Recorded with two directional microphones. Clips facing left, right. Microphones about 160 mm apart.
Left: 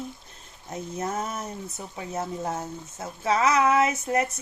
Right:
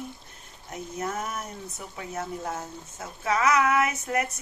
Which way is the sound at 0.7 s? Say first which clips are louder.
Left 2 dB; 30° left (ahead or behind).